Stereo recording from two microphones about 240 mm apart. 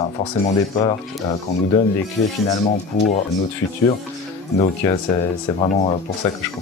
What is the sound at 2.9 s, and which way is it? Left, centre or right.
Speech, left.